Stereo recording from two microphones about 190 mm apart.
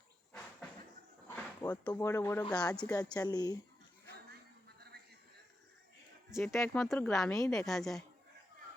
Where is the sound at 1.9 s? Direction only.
15° left (ahead or behind).